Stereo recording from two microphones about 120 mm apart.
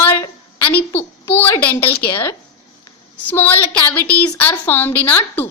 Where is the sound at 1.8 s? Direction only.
50° left (ahead or behind).